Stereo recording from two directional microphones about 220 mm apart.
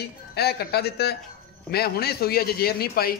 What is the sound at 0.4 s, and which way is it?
A man's voice, 45° left (ahead or behind).